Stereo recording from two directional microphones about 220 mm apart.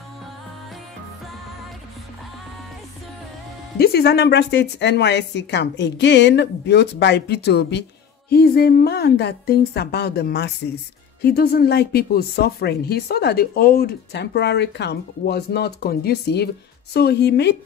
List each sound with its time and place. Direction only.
3.7 s speech: 45° left (ahead or behind)